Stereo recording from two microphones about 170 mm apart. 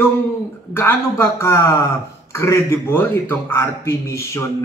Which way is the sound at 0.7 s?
15° left (ahead or behind).